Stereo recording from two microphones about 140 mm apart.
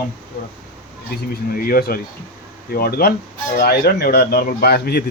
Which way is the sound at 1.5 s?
90° left.